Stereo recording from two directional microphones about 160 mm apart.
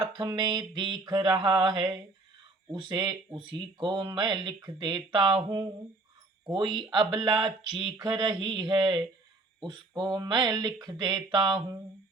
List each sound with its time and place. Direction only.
0.2 s speech: 25° right (ahead or behind)